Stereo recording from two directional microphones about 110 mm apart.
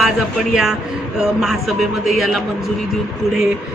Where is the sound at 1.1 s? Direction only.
5° right (ahead or behind).